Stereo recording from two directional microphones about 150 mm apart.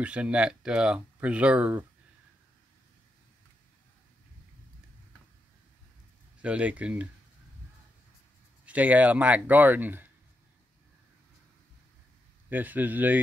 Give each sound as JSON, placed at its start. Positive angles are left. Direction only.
{"t": 0.0, "sound": "speech", "side_deg": -10}
{"t": 6.4, "sound": "speech", "side_deg": -10}
{"t": 8.6, "sound": "speech", "side_deg": -10}
{"t": 12.4, "sound": "speech", "side_deg": -10}